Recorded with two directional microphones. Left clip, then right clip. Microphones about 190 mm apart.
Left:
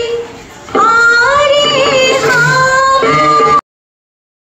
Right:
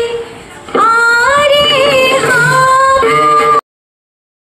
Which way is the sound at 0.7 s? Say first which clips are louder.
Left 1 dB; 50° right (ahead or behind).